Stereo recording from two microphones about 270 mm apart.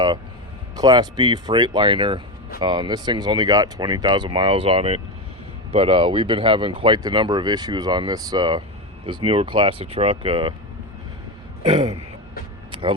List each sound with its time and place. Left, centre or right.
0.8 s speech: centre
11.7 s speech: right
12.7 s a sound: centre